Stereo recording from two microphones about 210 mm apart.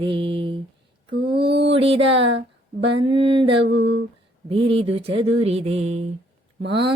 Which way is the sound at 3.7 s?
55° right (ahead or behind).